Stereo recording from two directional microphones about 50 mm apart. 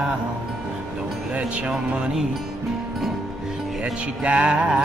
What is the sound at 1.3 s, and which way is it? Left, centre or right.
Music, right.